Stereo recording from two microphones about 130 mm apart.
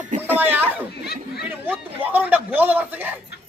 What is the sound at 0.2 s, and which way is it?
A man's voice, 15° right (ahead or behind).